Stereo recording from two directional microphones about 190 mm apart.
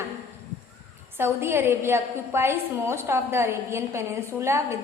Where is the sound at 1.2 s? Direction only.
15° right (ahead or behind).